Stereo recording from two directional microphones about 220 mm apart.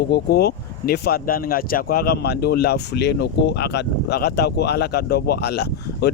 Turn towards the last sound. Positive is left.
turn(degrees=45)  # may be behind; listen again after turning